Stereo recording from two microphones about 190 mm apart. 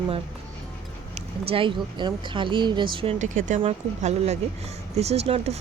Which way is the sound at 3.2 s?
40° right (ahead or behind).